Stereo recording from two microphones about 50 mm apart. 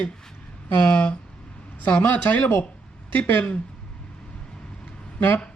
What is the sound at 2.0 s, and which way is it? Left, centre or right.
Speech, left.